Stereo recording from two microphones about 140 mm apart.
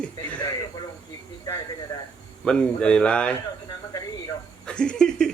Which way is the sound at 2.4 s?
5° left (ahead or behind).